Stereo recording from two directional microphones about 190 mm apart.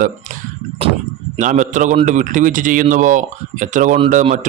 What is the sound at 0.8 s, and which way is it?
Speech, 30° right (ahead or behind).